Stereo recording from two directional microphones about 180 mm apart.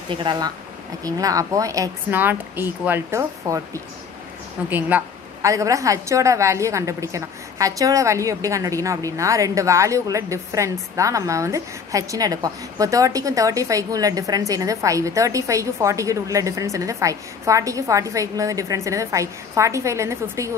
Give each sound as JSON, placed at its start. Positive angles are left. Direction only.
{"t": 0.2, "sound": "a woman's voice", "side_deg": -25}
{"t": 4.6, "sound": "a woman's voice", "side_deg": -10}